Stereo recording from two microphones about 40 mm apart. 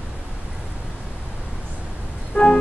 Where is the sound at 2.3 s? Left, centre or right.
Left.